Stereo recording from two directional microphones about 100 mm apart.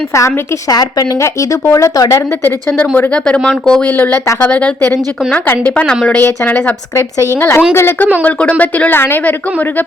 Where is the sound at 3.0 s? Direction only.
15° left (ahead or behind).